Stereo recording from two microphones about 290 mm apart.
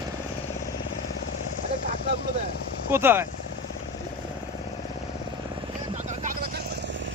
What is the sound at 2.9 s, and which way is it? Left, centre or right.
Speech, centre.